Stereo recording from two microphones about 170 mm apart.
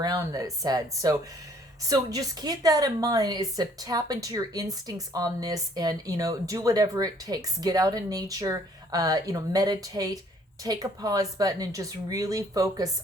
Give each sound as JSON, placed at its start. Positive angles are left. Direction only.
{"t": 0.0, "sound": "a woman's voice", "side_deg": -20}